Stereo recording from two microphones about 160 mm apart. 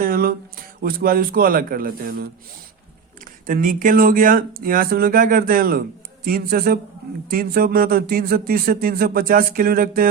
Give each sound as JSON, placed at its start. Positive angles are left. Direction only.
{"t": 0.0, "sound": "speech", "side_deg": -65}
{"t": 3.4, "sound": "speech", "side_deg": -60}